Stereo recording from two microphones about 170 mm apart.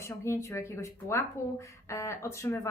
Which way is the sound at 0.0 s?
15° left (ahead or behind).